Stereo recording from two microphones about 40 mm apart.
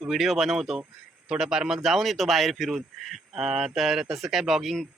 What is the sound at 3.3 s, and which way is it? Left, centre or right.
Speech, centre.